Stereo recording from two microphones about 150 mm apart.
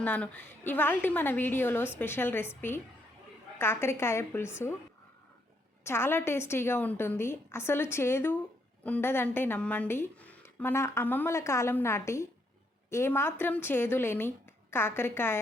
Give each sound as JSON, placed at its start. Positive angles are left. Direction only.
{"t": 0.0, "sound": "a woman's voice", "side_deg": 10}
{"t": 5.8, "sound": "a woman's voice", "side_deg": 15}